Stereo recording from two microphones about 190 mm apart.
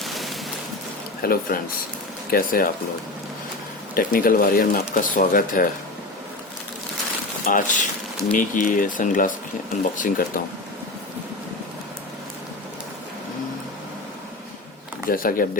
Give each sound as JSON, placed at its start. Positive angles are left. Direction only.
{"t": 0.0, "sound": "a sound", "side_deg": 0}
{"t": 1.2, "sound": "speech", "side_deg": 50}
{"t": 3.9, "sound": "speech", "side_deg": 50}
{"t": 7.4, "sound": "speech", "side_deg": 45}
{"t": 15.0, "sound": "speech", "side_deg": 50}